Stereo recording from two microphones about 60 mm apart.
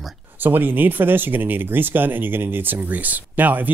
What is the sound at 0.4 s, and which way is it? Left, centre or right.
Speech, right.